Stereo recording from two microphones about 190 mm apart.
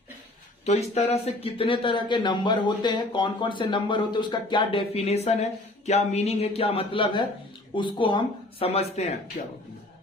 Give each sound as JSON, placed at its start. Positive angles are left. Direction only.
{"t": 0.6, "sound": "speech", "side_deg": 35}
{"t": 4.9, "sound": "speech", "side_deg": 35}